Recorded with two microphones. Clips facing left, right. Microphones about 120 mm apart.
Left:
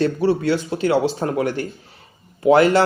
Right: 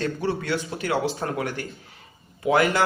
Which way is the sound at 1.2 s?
30° left (ahead or behind).